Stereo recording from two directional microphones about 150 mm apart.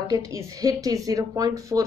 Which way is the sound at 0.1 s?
25° right (ahead or behind).